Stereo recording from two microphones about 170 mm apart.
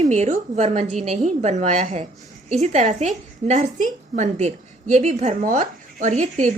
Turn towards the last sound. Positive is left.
turn(degrees=-50)  # may be behind; listen again after turning